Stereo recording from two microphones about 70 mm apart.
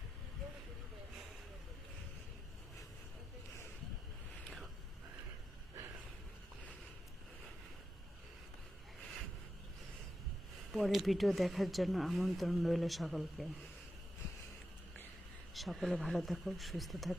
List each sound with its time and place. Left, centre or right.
10.7 s speech: centre
15.5 s speech: centre